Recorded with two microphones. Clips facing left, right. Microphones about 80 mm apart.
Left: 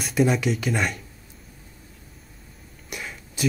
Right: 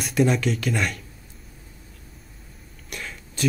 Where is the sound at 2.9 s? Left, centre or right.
Centre.